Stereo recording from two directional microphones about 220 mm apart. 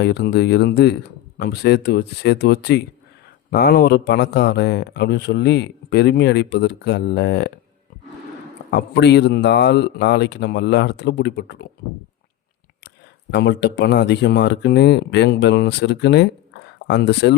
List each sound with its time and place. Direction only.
0.0 s speech: 50° left (ahead or behind)
8.7 s speech: 50° left (ahead or behind)
13.3 s speech: 50° left (ahead or behind)